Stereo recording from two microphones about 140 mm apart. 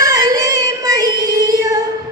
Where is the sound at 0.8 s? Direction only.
30° right (ahead or behind).